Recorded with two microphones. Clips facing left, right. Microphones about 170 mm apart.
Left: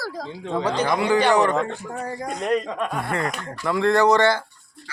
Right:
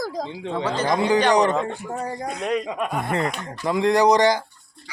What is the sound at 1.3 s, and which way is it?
Speech, 20° right (ahead or behind).